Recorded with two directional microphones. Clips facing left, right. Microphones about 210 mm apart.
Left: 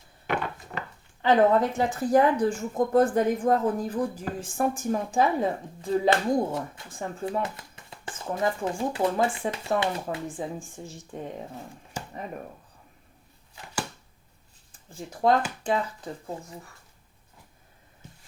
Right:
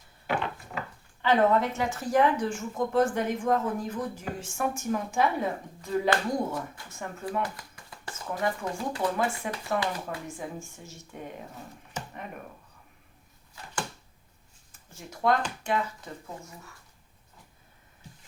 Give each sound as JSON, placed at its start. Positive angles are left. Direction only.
{"t": 1.2, "sound": "speech", "side_deg": 30}
{"t": 14.8, "sound": "speech", "side_deg": 30}